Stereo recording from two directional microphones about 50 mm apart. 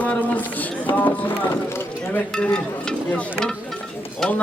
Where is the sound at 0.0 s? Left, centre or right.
Left.